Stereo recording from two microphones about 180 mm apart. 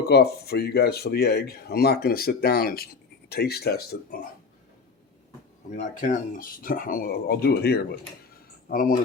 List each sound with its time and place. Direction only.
0.1 s speech: 60° left (ahead or behind)
5.7 s speech: 45° left (ahead or behind)